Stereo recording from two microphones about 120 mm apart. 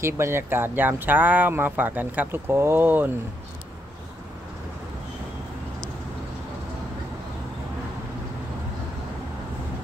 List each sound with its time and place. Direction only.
0.0 s speech: 20° right (ahead or behind)